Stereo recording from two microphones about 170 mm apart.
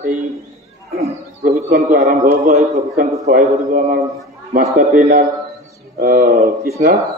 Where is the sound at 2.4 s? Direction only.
45° right (ahead or behind).